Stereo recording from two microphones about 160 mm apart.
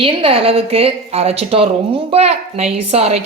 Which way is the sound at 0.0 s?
35° right (ahead or behind).